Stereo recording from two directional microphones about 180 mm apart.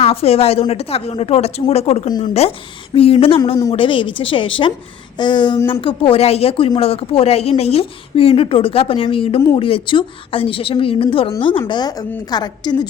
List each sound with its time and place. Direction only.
0.0 s a woman's voice: 35° left (ahead or behind)